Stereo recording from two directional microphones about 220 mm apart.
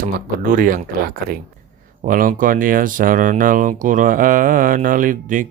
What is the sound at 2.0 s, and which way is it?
Speech, 40° right (ahead or behind).